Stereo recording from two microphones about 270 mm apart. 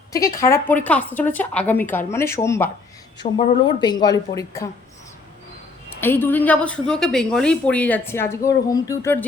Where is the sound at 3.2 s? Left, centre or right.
Left.